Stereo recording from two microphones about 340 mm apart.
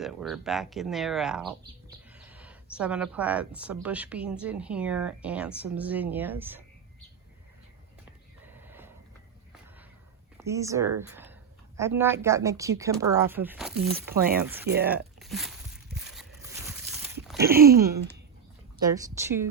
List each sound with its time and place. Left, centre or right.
0.0 s speech: centre
8.6 s a sound: centre
10.3 s speech: centre
14.8 s a sound: centre
17.6 s speech: right
18.9 s speech: centre